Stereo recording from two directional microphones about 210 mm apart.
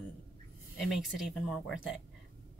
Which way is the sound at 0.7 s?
Centre (ahead or behind).